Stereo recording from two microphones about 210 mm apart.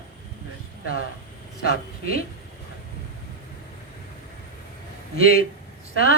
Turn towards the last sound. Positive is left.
turn(degrees=45)  # may be behind; listen again after turning